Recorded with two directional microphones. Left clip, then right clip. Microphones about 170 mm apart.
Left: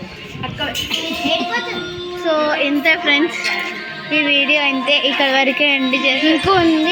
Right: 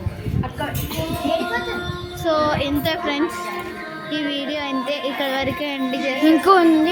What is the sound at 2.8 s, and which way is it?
Music, 35° left (ahead or behind).